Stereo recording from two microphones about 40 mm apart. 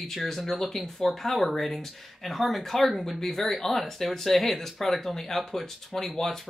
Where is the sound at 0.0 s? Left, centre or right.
Centre.